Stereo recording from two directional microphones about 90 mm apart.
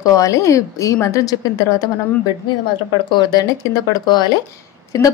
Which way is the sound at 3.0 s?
55° left (ahead or behind).